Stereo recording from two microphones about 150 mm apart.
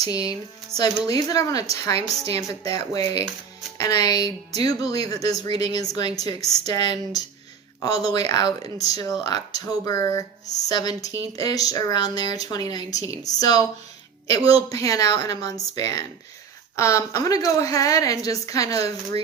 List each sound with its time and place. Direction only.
0.1 s speech: 25° left (ahead or behind)
14.7 s speech: 20° left (ahead or behind)